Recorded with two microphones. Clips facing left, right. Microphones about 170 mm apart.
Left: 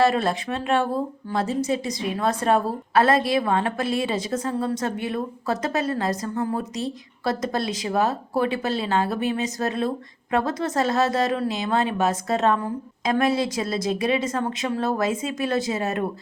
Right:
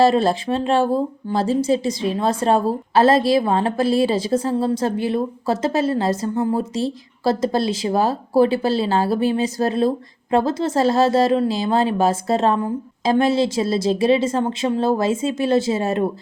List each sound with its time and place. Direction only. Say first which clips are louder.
0.0 s a woman's voice: right 5 dB; 30° right (ahead or behind)